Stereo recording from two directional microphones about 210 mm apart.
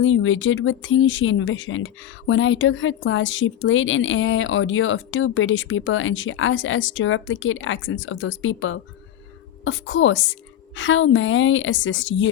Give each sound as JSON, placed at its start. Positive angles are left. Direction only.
{"t": 0.0, "sound": "a woman's voice", "side_deg": 70}